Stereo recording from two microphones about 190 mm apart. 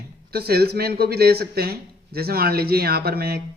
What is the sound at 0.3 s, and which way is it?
Speech, 55° right (ahead or behind).